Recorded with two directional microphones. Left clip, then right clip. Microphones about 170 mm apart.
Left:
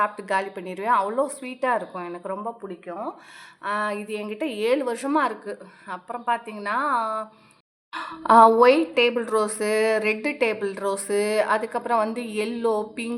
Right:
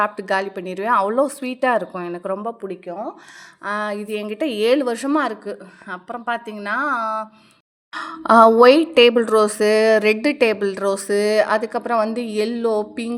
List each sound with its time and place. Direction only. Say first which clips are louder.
0.0 s a woman's voice: right 4 dB; 35° right (ahead or behind)